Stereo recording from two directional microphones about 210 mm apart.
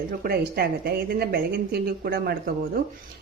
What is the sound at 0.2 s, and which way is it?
Speech, 45° right (ahead or behind).